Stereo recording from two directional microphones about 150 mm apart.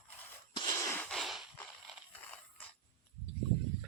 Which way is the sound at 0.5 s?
25° left (ahead or behind).